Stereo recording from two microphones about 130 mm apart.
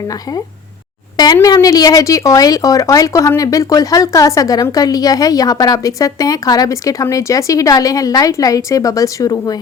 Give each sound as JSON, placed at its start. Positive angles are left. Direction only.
{"t": 0.1, "sound": "speech", "side_deg": 25}